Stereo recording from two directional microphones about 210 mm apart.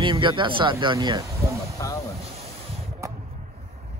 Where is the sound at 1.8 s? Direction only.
15° left (ahead or behind).